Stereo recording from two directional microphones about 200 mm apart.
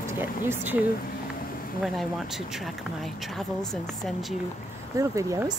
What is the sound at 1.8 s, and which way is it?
Speech, centre (ahead or behind).